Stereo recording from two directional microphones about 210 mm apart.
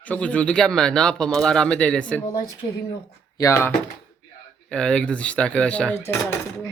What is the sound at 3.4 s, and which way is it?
Speech, 10° left (ahead or behind).